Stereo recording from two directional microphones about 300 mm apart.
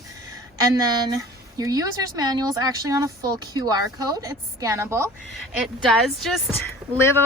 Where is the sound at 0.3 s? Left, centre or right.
Centre.